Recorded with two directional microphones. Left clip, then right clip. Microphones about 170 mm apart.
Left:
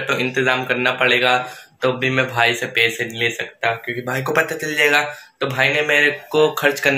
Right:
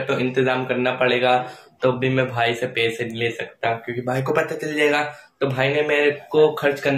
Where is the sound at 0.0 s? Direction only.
Centre (ahead or behind).